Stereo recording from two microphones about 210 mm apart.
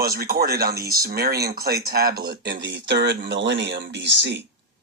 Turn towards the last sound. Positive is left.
turn(degrees=-55)  # may be behind; listen again after turning